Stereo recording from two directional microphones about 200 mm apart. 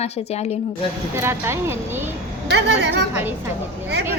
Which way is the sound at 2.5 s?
60° right (ahead or behind).